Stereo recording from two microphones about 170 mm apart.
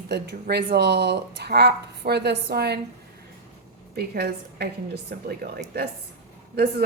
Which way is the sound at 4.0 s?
70° right (ahead or behind).